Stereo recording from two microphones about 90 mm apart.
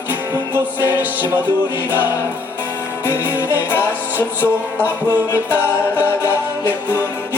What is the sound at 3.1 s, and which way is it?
Music, 20° right (ahead or behind).